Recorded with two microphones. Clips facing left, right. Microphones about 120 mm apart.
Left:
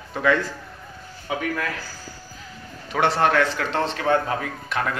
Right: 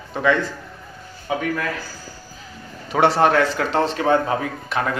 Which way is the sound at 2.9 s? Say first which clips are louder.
Right 4 dB; 35° right (ahead or behind).